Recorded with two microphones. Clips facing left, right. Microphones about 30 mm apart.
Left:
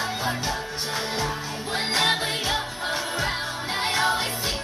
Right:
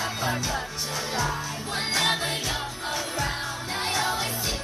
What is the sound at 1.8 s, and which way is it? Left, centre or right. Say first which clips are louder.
Music: left 2 dB; left.